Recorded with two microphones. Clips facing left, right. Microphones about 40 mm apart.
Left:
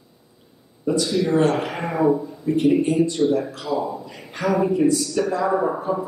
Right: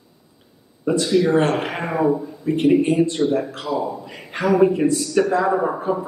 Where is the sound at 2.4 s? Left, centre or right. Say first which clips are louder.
Right 2 dB; right.